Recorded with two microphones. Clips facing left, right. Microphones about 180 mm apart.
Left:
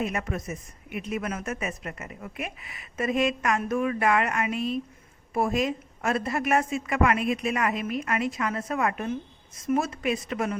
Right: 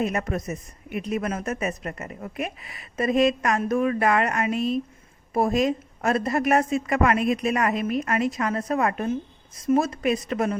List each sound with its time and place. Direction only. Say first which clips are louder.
0.0 s a woman's voice: right 4 dB; 40° right (ahead or behind)